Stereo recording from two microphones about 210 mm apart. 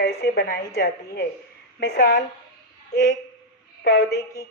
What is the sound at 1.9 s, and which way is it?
Speech, 40° left (ahead or behind).